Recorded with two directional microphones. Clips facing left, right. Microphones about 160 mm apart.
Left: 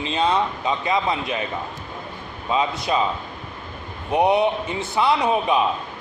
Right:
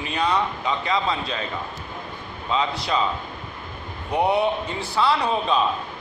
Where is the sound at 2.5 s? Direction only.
20° left (ahead or behind).